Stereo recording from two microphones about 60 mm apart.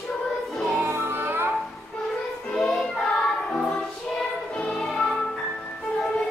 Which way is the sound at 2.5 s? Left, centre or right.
Centre.